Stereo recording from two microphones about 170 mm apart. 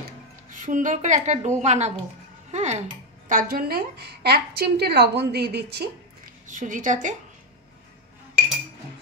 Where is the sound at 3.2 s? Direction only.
55° right (ahead or behind); by 5.8 s 75° right (ahead or behind).